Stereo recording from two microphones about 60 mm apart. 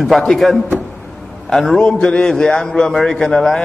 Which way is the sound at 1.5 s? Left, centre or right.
Centre.